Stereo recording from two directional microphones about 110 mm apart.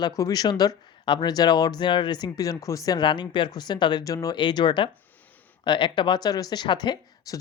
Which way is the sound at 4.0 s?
30° left (ahead or behind).